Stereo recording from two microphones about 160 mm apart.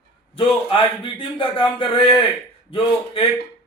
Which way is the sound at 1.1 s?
35° left (ahead or behind).